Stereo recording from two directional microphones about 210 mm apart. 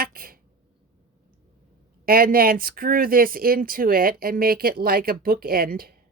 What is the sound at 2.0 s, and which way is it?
Speech, 45° right (ahead or behind).